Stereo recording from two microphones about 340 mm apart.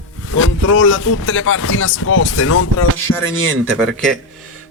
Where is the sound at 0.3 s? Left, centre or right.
Left.